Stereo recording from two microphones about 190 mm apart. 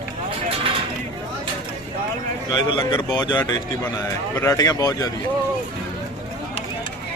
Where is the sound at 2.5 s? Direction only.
25° left (ahead or behind).